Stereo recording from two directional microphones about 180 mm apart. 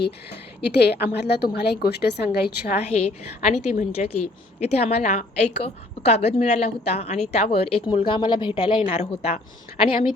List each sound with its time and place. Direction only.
0.6 s a woman's voice: 65° left (ahead or behind)
2.9 s a woman's voice: 35° left (ahead or behind)